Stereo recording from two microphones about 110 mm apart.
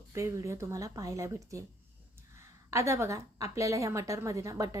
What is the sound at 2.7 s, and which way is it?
A woman's voice, 25° right (ahead or behind).